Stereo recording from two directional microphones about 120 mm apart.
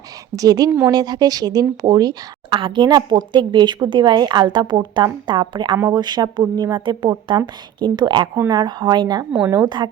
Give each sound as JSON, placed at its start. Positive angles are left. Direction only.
{"t": 0.3, "sound": "a woman's voice", "side_deg": -30}
{"t": 2.5, "sound": "a woman's voice", "side_deg": -45}
{"t": 5.7, "sound": "speech", "side_deg": -25}
{"t": 6.0, "sound": "a woman's voice", "side_deg": -35}